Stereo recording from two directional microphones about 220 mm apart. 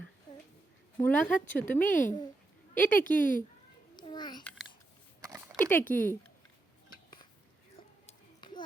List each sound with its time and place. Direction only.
0.9 s speech: 10° left (ahead or behind)
1.9 s speech: 35° left (ahead or behind)
3.9 s babbling: 20° left (ahead or behind)
5.5 s a sound: 10° left (ahead or behind)
5.9 s speech: 10° left (ahead or behind)
8.0 s a sound: 20° left (ahead or behind)